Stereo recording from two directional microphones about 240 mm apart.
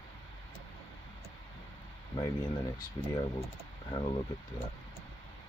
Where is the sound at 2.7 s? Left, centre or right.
Centre.